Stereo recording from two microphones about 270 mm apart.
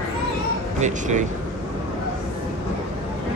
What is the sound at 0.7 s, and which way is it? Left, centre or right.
Speech, right.